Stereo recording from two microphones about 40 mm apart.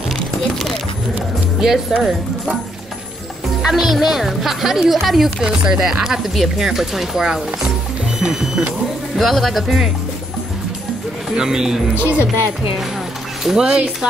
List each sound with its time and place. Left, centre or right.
1.6 s speech: centre
3.6 s speech: centre
5.4 s speech: centre
9.2 s speech: centre
11.3 s speech: centre
12.0 s speech: right
13.6 s speech: centre